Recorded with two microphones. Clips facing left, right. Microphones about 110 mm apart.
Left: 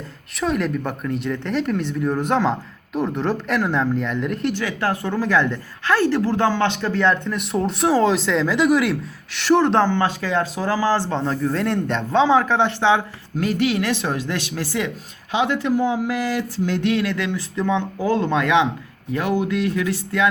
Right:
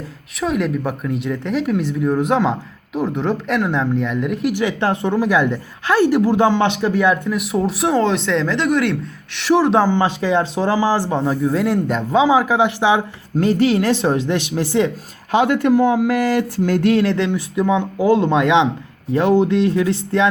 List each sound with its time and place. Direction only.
0.3 s speech: centre (ahead or behind)
4.5 s a woman's voice: 20° right (ahead or behind); by 9.9 s 5° right (ahead or behind)
9.9 s a woman's voice: 20° right (ahead or behind)
13.3 s speech: 30° right (ahead or behind)
15.3 s speech: 55° right (ahead or behind); by 17.3 s 30° right (ahead or behind)
17.3 s a woman's voice: 15° right (ahead or behind)